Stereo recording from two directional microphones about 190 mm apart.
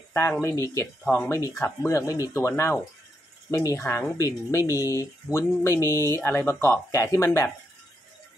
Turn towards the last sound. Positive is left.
turn(degrees=15)  # may be behind; listen again after turning